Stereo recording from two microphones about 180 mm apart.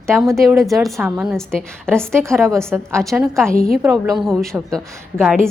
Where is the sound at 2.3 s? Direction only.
15° right (ahead or behind).